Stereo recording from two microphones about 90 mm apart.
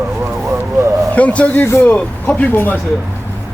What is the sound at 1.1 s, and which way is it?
Speech, 15° left (ahead or behind).